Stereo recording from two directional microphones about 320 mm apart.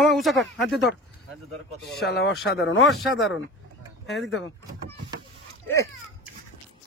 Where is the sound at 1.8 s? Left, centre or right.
Left.